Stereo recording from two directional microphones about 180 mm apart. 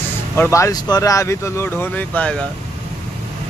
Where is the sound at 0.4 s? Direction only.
15° left (ahead or behind).